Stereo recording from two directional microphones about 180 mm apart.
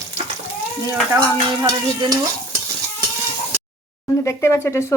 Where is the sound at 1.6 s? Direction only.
20° right (ahead or behind).